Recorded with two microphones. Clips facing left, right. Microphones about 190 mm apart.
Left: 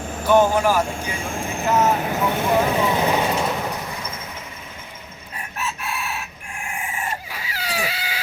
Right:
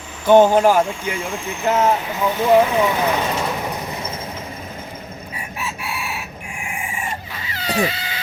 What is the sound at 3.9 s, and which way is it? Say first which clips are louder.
Train: right 4 dB; 25° right (ahead or behind).